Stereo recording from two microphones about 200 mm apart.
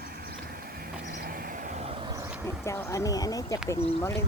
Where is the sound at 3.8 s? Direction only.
30° left (ahead or behind).